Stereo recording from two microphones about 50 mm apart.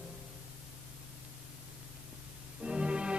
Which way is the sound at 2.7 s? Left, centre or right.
Centre.